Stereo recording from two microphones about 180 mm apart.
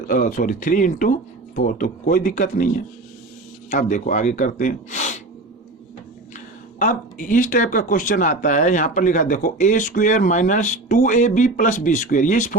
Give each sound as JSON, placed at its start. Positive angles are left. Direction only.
{"t": 0.1, "sound": "speech", "side_deg": 45}
{"t": 6.3, "sound": "speech", "side_deg": 45}